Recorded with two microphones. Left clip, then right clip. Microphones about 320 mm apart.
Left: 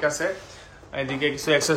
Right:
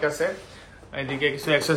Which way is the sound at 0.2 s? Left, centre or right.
Centre.